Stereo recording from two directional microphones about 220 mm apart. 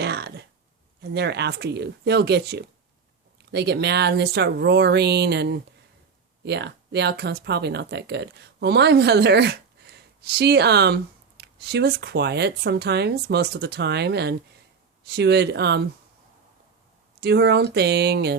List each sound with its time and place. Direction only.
0.0 s a sound: 50° right (ahead or behind)
1.1 s speech: 50° right (ahead or behind)
17.2 s speech: 50° right (ahead or behind)